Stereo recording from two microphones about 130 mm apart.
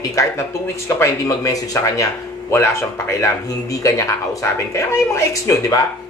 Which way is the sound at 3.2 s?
25° left (ahead or behind).